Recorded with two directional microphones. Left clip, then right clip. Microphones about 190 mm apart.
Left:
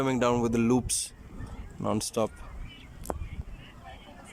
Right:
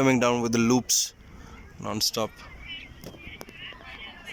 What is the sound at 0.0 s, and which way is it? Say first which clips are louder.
Speech: right 4 dB; centre (ahead or behind).